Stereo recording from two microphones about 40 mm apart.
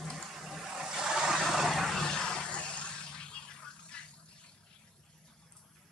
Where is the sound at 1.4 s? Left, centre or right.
Centre; by 4.1 s left.